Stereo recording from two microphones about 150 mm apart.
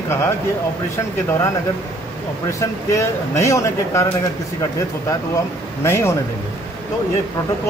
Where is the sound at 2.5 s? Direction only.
20° left (ahead or behind).